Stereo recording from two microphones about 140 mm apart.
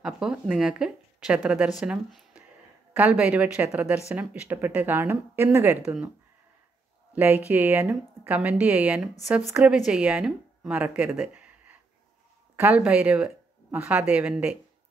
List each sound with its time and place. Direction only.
0.0 s speech: 5° right (ahead or behind)
7.1 s speech: 15° right (ahead or behind)
11.0 s a sound: 10° right (ahead or behind)
12.5 s speech: 10° right (ahead or behind)